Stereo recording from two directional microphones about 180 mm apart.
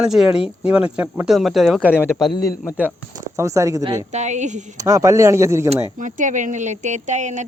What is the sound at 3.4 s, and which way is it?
Speech, 15° right (ahead or behind).